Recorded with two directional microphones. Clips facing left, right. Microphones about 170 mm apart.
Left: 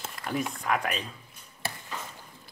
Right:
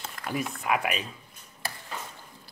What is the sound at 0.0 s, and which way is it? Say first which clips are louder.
Speech: left 1 dB; centre (ahead or behind).